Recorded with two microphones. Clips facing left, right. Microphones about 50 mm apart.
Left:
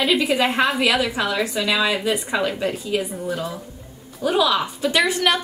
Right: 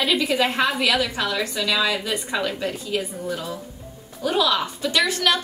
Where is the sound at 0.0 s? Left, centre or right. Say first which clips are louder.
Left 2 dB; centre.